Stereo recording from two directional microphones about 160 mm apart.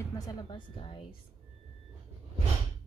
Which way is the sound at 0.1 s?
20° left (ahead or behind).